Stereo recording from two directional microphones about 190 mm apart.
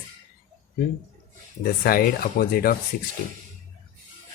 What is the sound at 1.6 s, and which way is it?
Speech, 50° left (ahead or behind).